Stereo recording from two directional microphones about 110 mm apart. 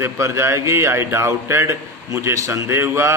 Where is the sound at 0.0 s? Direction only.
25° right (ahead or behind).